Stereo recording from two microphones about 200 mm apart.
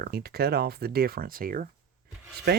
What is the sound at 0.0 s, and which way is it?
Speech, 50° right (ahead or behind).